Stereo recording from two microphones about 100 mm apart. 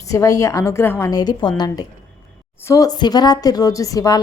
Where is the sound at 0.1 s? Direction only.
35° left (ahead or behind).